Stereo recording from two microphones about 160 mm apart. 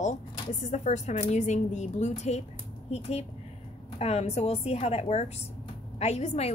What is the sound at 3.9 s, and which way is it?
A woman's voice, 40° left (ahead or behind).